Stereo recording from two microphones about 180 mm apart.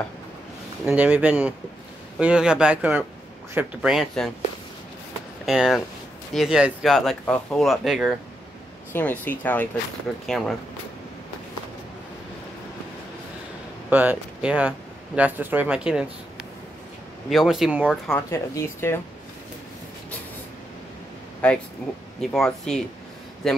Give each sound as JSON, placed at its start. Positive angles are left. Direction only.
{"t": 0.8, "sound": "speech", "side_deg": -10}
{"t": 5.4, "sound": "speech", "side_deg": 0}
{"t": 8.9, "sound": "speech", "side_deg": 10}
{"t": 13.8, "sound": "speech", "side_deg": -10}
{"t": 17.3, "sound": "speech", "side_deg": 0}
{"t": 18.1, "sound": "speech", "side_deg": 15}
{"t": 21.4, "sound": "speech", "side_deg": 5}